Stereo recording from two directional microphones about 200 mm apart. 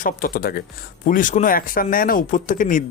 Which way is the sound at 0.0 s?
45° left (ahead or behind).